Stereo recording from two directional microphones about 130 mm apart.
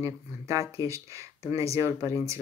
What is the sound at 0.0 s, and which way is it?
Speech, 25° right (ahead or behind).